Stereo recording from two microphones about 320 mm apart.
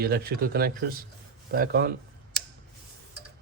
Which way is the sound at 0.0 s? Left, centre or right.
Right.